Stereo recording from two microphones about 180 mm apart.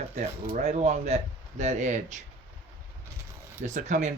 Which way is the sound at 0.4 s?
40° right (ahead or behind).